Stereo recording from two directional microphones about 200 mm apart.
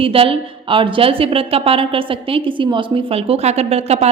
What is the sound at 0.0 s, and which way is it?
A woman's voice, 25° right (ahead or behind).